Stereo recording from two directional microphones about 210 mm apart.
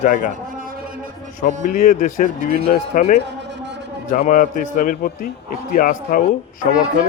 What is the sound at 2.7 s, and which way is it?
A man's voice, 40° left (ahead or behind).